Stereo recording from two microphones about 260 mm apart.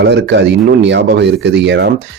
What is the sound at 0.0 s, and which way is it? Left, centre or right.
Speech, right.